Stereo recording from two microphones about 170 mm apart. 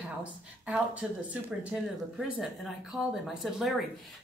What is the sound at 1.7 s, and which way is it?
Speech, 5° right (ahead or behind).